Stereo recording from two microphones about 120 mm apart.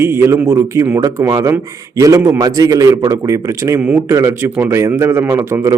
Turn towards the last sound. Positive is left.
turn(degrees=-25)  # may be behind; listen again after turning